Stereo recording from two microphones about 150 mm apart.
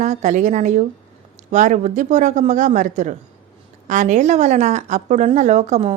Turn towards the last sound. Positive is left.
turn(degrees=-50)  # may be behind; listen again after turning